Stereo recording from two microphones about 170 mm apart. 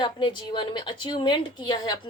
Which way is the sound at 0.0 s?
30° left (ahead or behind).